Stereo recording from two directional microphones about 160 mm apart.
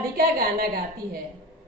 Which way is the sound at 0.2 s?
70° right (ahead or behind).